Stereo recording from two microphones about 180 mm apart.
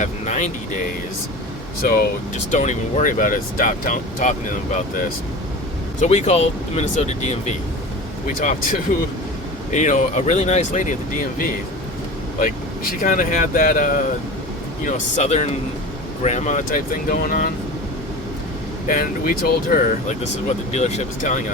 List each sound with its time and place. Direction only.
0.0 s speech: 40° left (ahead or behind)
2.5 s speech: 40° left (ahead or behind)
6.0 s speech: 40° left (ahead or behind)
8.3 s speech: 50° left (ahead or behind)
9.7 s speech: 45° left (ahead or behind)
12.9 s speech: 50° left (ahead or behind)
18.9 s speech: 50° left (ahead or behind)
20.7 s speech: 40° left (ahead or behind)